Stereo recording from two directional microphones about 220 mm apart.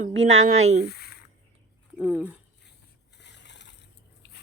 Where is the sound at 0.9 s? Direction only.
45° left (ahead or behind).